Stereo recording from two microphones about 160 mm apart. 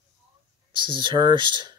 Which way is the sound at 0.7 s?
30° right (ahead or behind).